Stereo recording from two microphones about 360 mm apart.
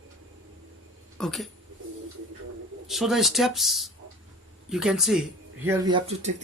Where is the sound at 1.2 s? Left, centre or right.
Centre.